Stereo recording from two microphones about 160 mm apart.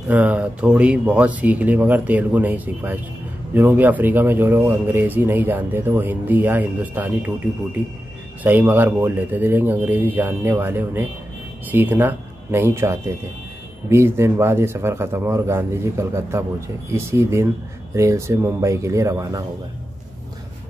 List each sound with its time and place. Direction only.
0.1 s speech: 10° right (ahead or behind)
8.5 s speech: 10° right (ahead or behind)